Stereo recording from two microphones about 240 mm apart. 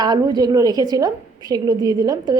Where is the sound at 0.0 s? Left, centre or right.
Centre.